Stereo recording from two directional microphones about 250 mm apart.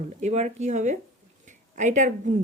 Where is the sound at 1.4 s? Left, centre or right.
Right.